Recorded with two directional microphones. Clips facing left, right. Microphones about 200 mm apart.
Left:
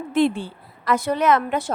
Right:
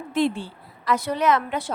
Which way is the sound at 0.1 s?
55° left (ahead or behind).